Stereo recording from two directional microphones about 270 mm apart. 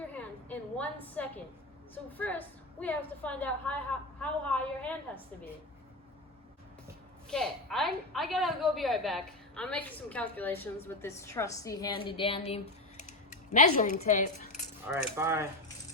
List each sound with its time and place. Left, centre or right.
0.4 s a sound: centre
1.2 s a woman's voice: centre
7.3 s a woman's voice: centre; by 12.5 s left
13.0 s typing: left
14.8 s speech: centre